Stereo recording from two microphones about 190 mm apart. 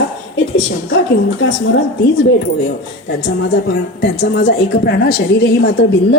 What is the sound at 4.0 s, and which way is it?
A woman's voice, 60° left (ahead or behind).